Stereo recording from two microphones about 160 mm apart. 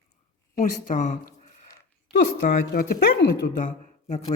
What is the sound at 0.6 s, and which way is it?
Speech, 50° left (ahead or behind).